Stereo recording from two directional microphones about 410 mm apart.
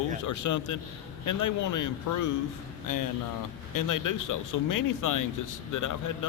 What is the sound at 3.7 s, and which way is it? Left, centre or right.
Speech, left.